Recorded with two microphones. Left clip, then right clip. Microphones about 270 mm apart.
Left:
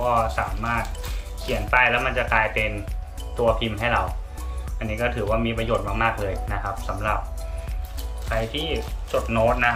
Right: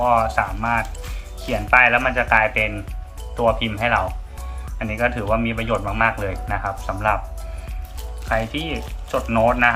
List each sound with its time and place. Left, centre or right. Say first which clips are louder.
0.0 s speech: right 4 dB; centre
8.3 s speech: right 3 dB; centre